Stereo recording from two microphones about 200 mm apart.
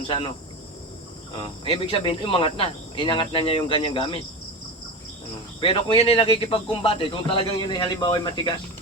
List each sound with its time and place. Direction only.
0.1 s speech: 25° left (ahead or behind)
1.4 s speech: 30° left (ahead or behind)
5.5 s speech: 25° left (ahead or behind)